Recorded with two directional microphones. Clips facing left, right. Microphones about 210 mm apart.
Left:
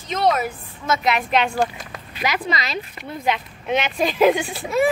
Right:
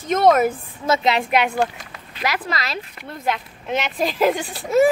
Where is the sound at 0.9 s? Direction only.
30° right (ahead or behind).